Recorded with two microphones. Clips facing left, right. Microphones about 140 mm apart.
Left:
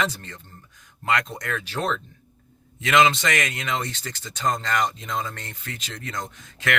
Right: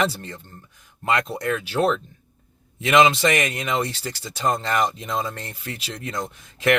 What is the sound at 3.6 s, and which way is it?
Speech, 10° right (ahead or behind).